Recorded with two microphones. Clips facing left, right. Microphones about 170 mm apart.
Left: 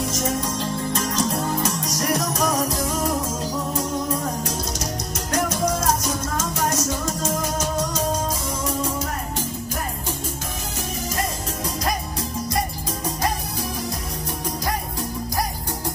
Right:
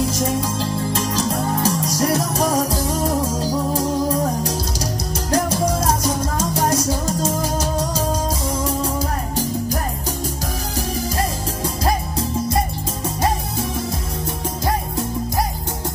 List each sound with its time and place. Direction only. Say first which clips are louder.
0.1 s music: right 3 dB; 30° right (ahead or behind)
11.1 s music: right 4 dB; 30° right (ahead or behind)